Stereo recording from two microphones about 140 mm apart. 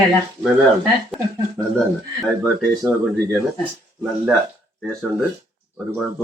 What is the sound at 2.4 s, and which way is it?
Speech, centre (ahead or behind).